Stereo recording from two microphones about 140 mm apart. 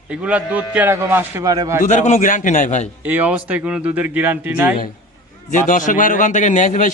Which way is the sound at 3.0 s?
10° right (ahead or behind).